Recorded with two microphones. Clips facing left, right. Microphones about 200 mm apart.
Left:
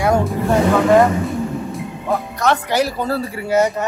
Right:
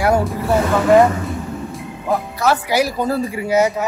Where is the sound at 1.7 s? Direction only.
Centre (ahead or behind).